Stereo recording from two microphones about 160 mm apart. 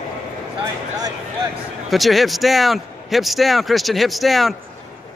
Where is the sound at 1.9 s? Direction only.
Centre (ahead or behind).